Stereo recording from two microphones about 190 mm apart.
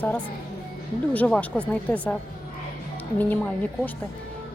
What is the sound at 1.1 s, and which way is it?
Speech, 10° left (ahead or behind).